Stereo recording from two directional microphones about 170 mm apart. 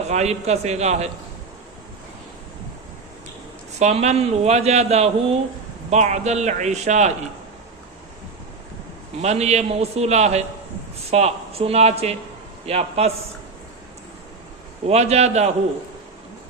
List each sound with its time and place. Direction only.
0.1 s speech: 40° right (ahead or behind)
3.8 s speech: 40° right (ahead or behind)
9.2 s speech: 40° right (ahead or behind)
14.8 s speech: 40° right (ahead or behind)